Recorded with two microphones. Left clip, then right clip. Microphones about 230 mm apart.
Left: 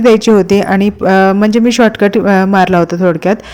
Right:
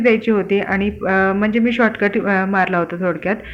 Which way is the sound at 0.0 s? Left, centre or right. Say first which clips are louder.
Left 8 dB; left.